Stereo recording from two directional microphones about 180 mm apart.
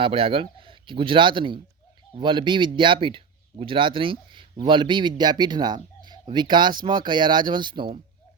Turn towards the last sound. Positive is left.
turn(degrees=-25)  # may be behind; listen again after turning